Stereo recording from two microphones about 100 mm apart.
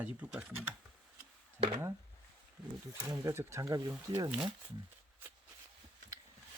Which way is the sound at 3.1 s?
40° right (ahead or behind).